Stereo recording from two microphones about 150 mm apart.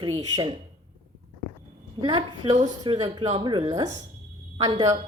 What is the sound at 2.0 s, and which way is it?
A woman's voice, 35° right (ahead or behind).